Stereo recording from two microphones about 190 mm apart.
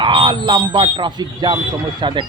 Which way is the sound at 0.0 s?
25° right (ahead or behind).